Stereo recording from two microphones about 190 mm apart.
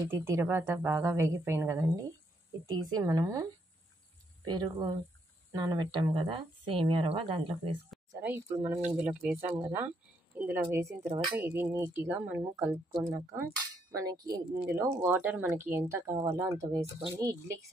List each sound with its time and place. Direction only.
0.0 s speech: 15° right (ahead or behind)
4.5 s speech: 20° right (ahead or behind)
8.2 s speech: 10° right (ahead or behind)